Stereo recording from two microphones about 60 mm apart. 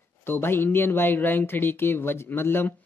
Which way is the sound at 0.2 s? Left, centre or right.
Left.